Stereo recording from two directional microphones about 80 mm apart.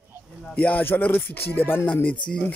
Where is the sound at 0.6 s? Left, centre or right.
Centre.